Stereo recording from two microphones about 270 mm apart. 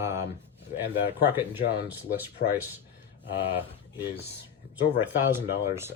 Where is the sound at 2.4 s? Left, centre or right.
Left.